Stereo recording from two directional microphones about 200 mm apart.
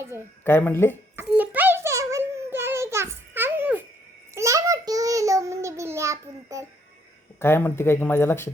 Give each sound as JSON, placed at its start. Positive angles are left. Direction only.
{"t": 0.0, "sound": "speech", "side_deg": -15}
{"t": 0.4, "sound": "speech", "side_deg": 10}
{"t": 1.1, "sound": "a sound", "side_deg": -10}
{"t": 4.4, "sound": "child singing", "side_deg": -15}
{"t": 7.3, "sound": "speech", "side_deg": 10}